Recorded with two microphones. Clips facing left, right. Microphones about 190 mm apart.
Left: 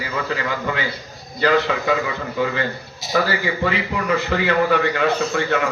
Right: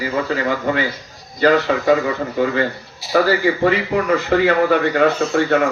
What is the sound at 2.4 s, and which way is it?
Speech, 45° right (ahead or behind).